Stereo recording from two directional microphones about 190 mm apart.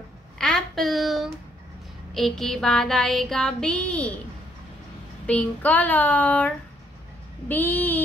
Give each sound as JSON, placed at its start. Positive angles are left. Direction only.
{"t": 0.4, "sound": "a sound", "side_deg": 5}
{"t": 2.1, "sound": "child singing", "side_deg": 0}
{"t": 5.2, "sound": "speech", "side_deg": 5}